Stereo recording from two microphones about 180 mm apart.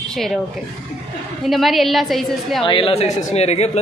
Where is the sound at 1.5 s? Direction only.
Centre (ahead or behind).